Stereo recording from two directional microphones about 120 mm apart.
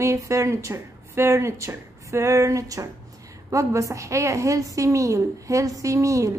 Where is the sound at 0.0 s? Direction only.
25° right (ahead or behind).